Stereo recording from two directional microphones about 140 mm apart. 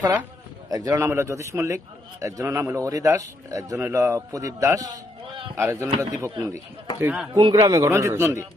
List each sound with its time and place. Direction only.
0.7 s a man's voice: 25° right (ahead or behind)
7.0 s speech: 10° right (ahead or behind)
7.3 s a man's voice: 30° right (ahead or behind)